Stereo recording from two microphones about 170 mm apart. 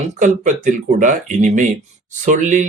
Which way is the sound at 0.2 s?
50° right (ahead or behind).